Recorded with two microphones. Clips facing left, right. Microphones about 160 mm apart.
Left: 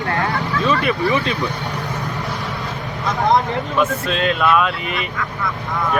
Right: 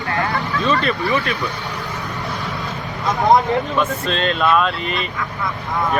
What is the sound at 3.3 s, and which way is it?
Speech, 5° left (ahead or behind).